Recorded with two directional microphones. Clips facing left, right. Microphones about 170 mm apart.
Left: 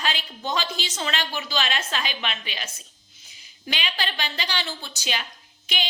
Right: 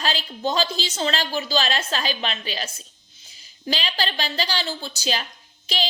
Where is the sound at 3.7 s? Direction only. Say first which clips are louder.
Right 4 dB; 35° right (ahead or behind).